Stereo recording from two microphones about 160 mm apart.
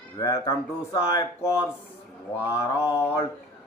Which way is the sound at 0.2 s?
20° left (ahead or behind).